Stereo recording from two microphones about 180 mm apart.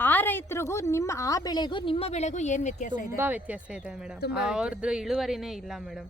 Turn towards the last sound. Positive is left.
turn(degrees=0)  # may be behind; listen again after turning